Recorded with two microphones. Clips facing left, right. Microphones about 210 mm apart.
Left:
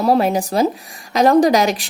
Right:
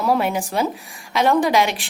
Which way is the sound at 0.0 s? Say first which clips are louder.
Left 4 dB; 35° left (ahead or behind).